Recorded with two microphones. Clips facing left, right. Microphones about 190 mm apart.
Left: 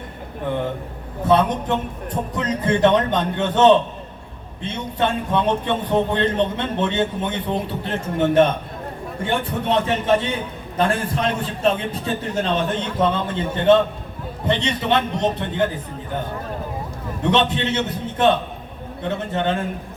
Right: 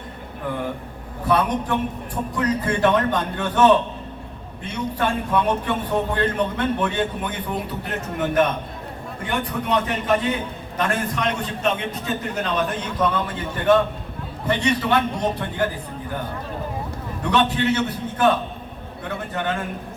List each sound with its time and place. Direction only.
1.3 s a man's voice: 25° left (ahead or behind)
17.3 s a man's voice: 25° left (ahead or behind)